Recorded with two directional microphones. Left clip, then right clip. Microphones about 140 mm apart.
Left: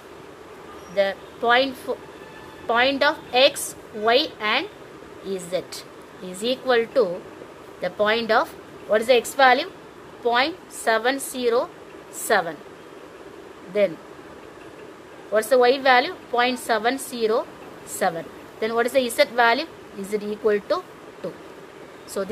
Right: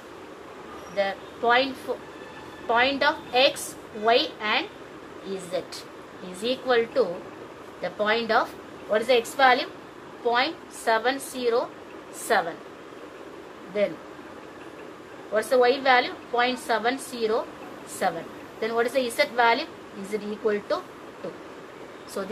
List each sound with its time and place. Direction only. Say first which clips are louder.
0.9 s a woman's voice: left 5 dB; 90° left
6.4 s a woman's voice: left 2 dB; 90° left
15.3 s a woman's voice: left 3 dB; 85° left
22.2 s a woman's voice: left 5 dB; 90° left